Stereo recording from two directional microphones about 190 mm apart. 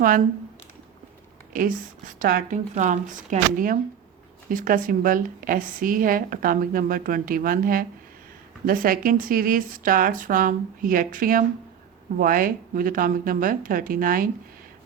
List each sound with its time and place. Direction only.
0.0 s a woman's voice: 45° right (ahead or behind)
1.5 s a woman's voice: 45° right (ahead or behind)